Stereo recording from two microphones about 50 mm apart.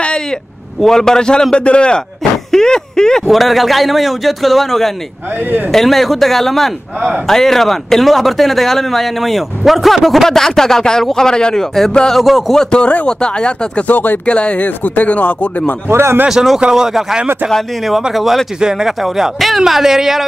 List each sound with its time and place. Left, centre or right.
0.7 s speech: centre
3.3 s a man's voice: centre
12.1 s a man's voice: centre
12.7 s speech: left
13.8 s speech: left
14.2 s speech: left
15.9 s speech: right
16.3 s speech: centre
18.1 s a man's voice: centre